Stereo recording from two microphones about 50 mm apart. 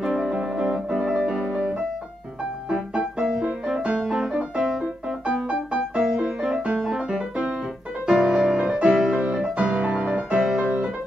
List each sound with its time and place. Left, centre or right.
0.0 s music: centre
4.4 s piano: centre
6.8 s music: centre
9.1 s music: right